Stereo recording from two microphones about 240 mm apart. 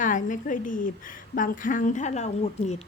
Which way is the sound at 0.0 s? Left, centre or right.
Left.